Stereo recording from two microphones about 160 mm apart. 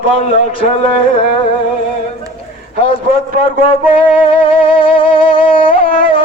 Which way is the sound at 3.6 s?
35° left (ahead or behind).